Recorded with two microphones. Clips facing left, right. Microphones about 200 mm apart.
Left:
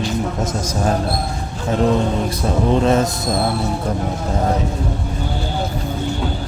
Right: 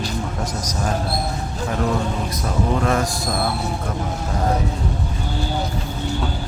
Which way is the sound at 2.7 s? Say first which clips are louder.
Left 6 dB; 25° left (ahead or behind).